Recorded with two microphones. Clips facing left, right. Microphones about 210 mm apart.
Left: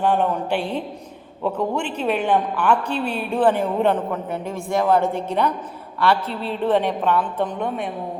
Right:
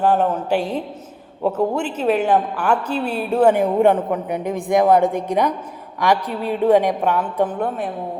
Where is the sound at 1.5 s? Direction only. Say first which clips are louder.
Right 3 dB; 5° right (ahead or behind).